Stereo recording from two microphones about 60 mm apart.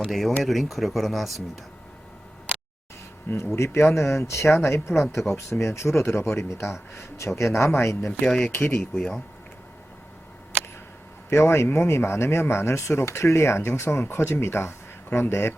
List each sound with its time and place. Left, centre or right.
0.0 s speech: centre
3.3 s speech: left
8.2 s speech: centre
8.5 s speech: left
11.3 s speech: left